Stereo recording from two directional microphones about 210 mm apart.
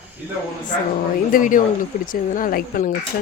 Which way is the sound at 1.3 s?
40° left (ahead or behind).